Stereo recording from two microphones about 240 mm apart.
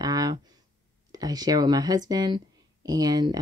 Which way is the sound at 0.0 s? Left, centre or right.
Centre.